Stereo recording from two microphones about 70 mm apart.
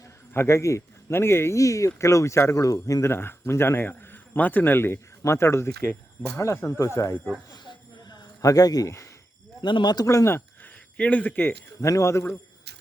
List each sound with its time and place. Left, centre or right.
0.3 s a man's voice: left
1.5 s speech: left
3.1 s a man's voice: left
5.9 s speech: left
6.4 s speech: left
7.5 s a sound: left
8.4 s a man's voice: left
9.6 s speech: left
10.1 s speech: left
10.6 s a sound: centre
11.8 s speech: left